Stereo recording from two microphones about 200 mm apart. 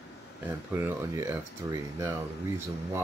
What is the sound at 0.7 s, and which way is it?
Speech, 10° right (ahead or behind).